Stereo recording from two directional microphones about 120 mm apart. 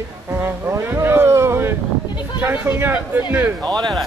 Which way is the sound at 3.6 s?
35° right (ahead or behind).